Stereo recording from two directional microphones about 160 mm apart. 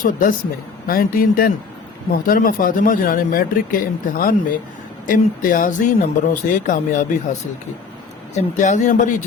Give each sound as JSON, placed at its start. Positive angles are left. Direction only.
{"t": 0.0, "sound": "speech", "side_deg": 60}
{"t": 8.4, "sound": "speech", "side_deg": 50}